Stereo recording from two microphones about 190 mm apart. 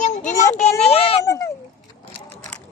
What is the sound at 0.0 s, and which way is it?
Child singing, 40° left (ahead or behind).